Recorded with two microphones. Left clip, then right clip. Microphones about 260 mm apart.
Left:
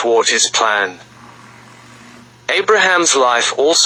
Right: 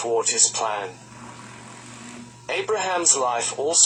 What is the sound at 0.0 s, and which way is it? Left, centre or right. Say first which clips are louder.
Speech: left 9 dB; left.